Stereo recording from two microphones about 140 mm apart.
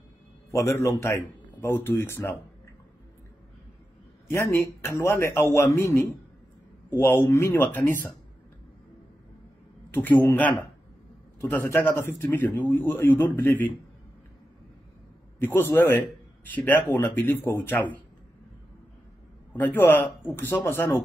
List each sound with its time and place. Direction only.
0.5 s speech: 20° left (ahead or behind)
4.3 s speech: 20° left (ahead or behind)
9.9 s speech: 15° left (ahead or behind)
11.5 s speech: 15° left (ahead or behind)
15.3 s speech: 15° left (ahead or behind)
19.5 s speech: 15° left (ahead or behind)